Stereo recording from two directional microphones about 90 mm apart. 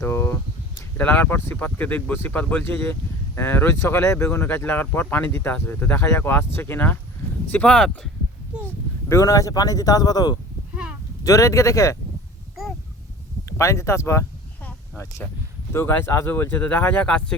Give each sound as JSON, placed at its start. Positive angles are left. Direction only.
{"t": 0.0, "sound": "a sound", "side_deg": 30}
{"t": 0.9, "sound": "speech", "side_deg": 20}
{"t": 9.0, "sound": "speech", "side_deg": 35}
{"t": 13.6, "sound": "speech", "side_deg": 35}
{"t": 15.2, "sound": "speech", "side_deg": 15}
{"t": 15.7, "sound": "speech", "side_deg": 30}